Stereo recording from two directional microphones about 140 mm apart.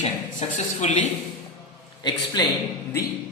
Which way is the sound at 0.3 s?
55° left (ahead or behind).